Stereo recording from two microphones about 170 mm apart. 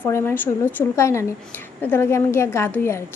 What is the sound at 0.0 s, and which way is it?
A woman's voice, 15° left (ahead or behind).